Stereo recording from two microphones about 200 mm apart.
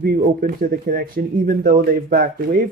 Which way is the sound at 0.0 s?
45° right (ahead or behind).